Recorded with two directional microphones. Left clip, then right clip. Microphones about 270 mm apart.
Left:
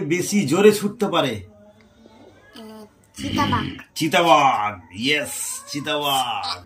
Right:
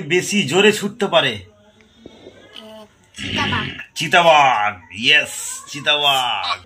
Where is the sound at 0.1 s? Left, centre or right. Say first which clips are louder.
Right 6 dB; centre.